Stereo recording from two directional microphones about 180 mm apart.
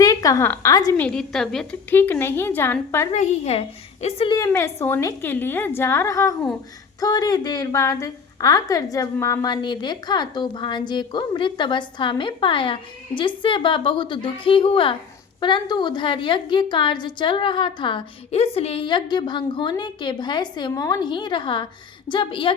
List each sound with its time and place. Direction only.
0.0 s a woman's voice: 20° left (ahead or behind)
0.9 s a woman's voice: 5° left (ahead or behind)
3.1 s a woman's voice: 40° left (ahead or behind)
4.4 s a woman's voice: 15° left (ahead or behind)